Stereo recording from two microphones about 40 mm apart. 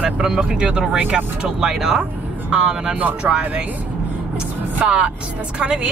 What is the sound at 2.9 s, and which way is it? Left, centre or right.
Music, right.